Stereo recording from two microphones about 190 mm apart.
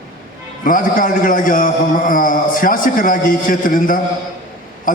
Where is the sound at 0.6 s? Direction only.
45° left (ahead or behind).